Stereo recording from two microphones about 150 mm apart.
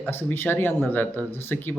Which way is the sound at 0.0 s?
15° left (ahead or behind).